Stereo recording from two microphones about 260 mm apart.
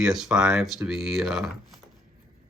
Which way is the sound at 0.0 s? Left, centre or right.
Centre.